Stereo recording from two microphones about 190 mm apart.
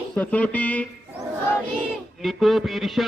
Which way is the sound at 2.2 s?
Centre (ahead or behind).